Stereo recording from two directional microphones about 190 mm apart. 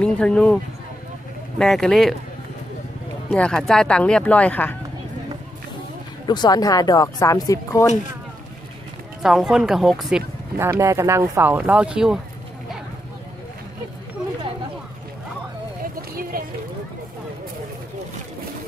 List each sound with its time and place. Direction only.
0.0 s speech: 5° left (ahead or behind)
1.6 s speech: centre (ahead or behind)
3.3 s speech: 5° left (ahead or behind)
6.2 s speech: 20° left (ahead or behind)
9.2 s speech: 5° right (ahead or behind)
10.6 s speech: 15° right (ahead or behind)
15.8 s a sound: 50° right (ahead or behind)